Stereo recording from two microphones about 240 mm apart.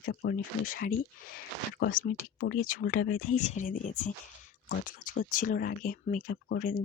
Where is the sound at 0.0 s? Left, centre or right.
Left.